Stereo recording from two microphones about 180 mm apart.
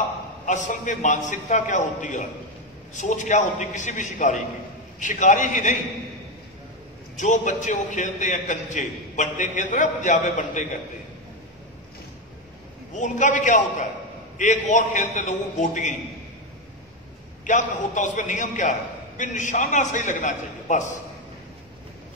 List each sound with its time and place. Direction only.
0.5 s a man's voice: 45° left (ahead or behind)
7.2 s a man's voice: 45° left (ahead or behind)
12.9 s a man's voice: 45° left (ahead or behind)
17.5 s a man's voice: 45° left (ahead or behind)